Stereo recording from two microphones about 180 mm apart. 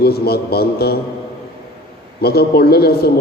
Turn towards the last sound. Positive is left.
turn(degrees=60)  # may be behind; listen again after turning